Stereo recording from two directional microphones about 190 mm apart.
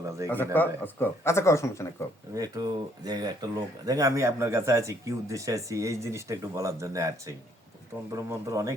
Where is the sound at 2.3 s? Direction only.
20° right (ahead or behind).